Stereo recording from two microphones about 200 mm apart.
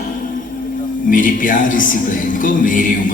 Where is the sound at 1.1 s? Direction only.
40° left (ahead or behind).